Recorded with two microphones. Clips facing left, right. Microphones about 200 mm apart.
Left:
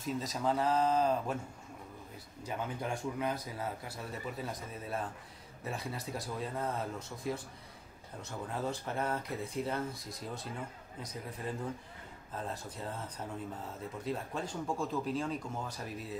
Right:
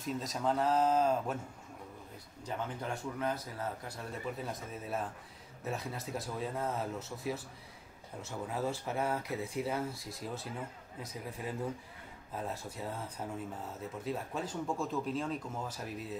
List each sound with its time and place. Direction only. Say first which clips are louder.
0.0 s speech: even; centre (ahead or behind)
2.4 s speech: left 1 dB; 10° left (ahead or behind); by 12.9 s 5° right (ahead or behind)
14.0 s speech: even; 5° right (ahead or behind)